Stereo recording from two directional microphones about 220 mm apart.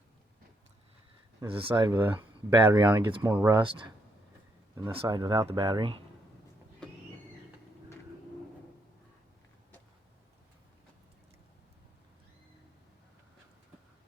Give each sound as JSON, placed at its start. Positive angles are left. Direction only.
{"t": 1.4, "sound": "speech", "side_deg": -25}
{"t": 1.7, "sound": "speech", "side_deg": -15}